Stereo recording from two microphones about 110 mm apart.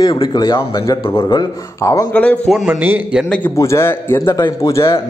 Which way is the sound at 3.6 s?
25° left (ahead or behind).